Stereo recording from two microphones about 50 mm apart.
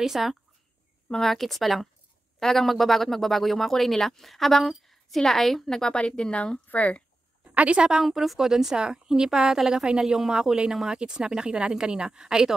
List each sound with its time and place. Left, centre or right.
0.0 s speech: centre; by 7.0 s left
7.5 s a woman's voice: right
8.0 s speech: centre